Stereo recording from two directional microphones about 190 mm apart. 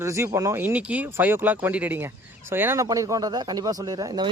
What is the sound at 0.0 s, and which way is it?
Speech, 15° right (ahead or behind).